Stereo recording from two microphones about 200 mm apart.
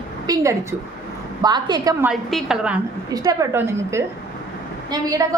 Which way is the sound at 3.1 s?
20° right (ahead or behind).